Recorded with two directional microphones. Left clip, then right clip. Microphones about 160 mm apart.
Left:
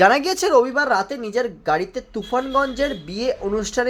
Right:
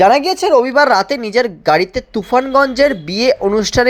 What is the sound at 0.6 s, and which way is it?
Speech, 30° right (ahead or behind).